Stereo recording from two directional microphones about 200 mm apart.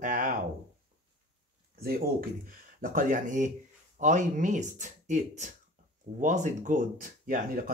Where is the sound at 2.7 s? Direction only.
45° right (ahead or behind).